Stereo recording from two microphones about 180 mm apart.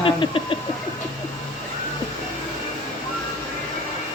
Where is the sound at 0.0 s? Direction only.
30° left (ahead or behind).